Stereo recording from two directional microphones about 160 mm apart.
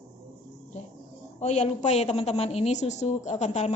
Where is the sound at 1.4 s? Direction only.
45° left (ahead or behind).